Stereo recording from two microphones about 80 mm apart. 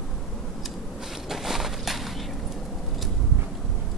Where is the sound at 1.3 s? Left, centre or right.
Centre.